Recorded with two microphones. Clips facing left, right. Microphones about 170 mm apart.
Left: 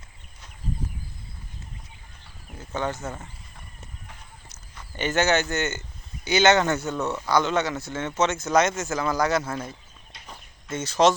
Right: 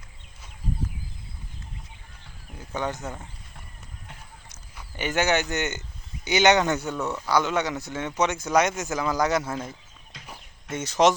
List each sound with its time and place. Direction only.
2.7 s a man's voice: 15° right (ahead or behind)
4.4 s a man's voice: 10° right (ahead or behind)
10.2 s a sound: 15° right (ahead or behind)